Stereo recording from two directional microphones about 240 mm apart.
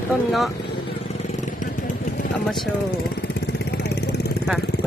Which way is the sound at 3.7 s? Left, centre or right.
Left.